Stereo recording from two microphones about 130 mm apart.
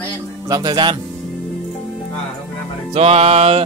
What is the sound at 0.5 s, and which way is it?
Speech, 30° right (ahead or behind).